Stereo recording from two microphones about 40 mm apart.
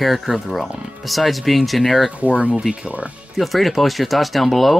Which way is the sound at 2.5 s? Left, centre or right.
Centre.